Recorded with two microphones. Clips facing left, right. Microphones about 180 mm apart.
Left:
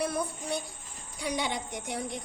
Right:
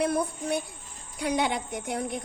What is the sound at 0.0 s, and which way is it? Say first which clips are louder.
A woman's voice: right 5 dB; 55° right (ahead or behind).